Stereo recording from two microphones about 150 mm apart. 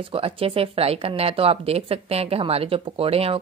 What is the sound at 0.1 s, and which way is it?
A woman's voice, 40° right (ahead or behind).